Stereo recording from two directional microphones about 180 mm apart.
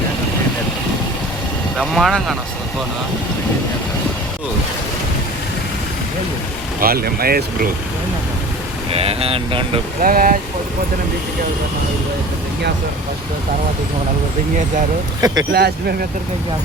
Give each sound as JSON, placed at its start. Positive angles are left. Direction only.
{"t": 1.8, "sound": "speech", "side_deg": 0}
{"t": 6.7, "sound": "speech", "side_deg": -55}
{"t": 8.9, "sound": "speech", "side_deg": -35}
{"t": 10.0, "sound": "speech", "side_deg": -50}
{"t": 15.2, "sound": "speech", "side_deg": -20}
{"t": 15.5, "sound": "speech", "side_deg": -60}